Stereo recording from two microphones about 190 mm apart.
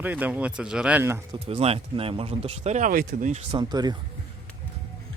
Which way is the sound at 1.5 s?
30° right (ahead or behind).